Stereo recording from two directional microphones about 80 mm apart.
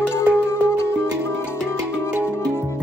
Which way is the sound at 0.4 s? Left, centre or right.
Left.